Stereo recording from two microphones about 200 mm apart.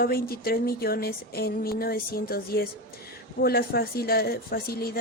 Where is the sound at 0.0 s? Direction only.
50° left (ahead or behind).